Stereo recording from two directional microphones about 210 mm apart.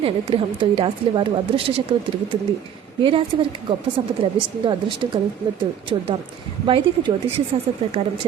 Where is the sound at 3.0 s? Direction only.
25° right (ahead or behind).